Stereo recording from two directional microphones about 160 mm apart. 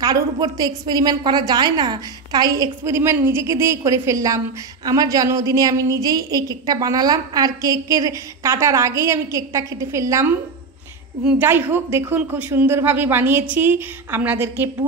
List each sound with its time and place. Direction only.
0.0 s a woman's voice: 25° right (ahead or behind)